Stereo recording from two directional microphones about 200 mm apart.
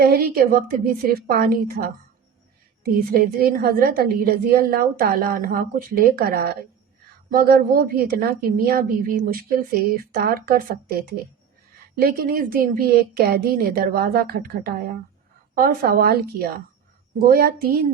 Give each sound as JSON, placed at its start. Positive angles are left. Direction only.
{"t": 0.0, "sound": "a woman's voice", "side_deg": -50}